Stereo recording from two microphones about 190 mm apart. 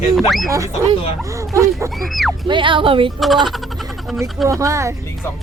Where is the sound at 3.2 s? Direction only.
Centre (ahead or behind).